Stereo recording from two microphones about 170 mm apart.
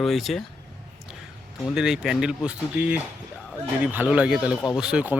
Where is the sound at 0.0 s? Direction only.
Centre (ahead or behind).